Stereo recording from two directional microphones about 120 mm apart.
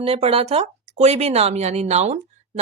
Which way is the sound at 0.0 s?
55° right (ahead or behind).